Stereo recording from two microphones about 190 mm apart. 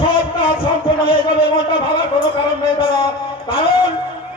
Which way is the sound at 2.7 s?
25° left (ahead or behind).